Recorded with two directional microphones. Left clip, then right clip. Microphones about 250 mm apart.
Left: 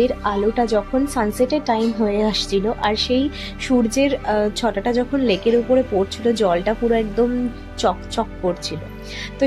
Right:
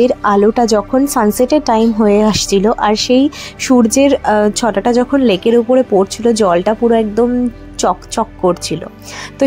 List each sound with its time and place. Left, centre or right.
0.0 s a woman's voice: right